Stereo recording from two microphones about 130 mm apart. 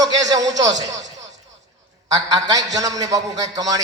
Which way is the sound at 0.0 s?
30° right (ahead or behind).